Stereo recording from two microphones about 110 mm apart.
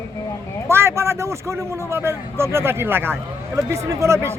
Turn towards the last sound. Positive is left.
turn(degrees=-25)  # may be behind; listen again after turning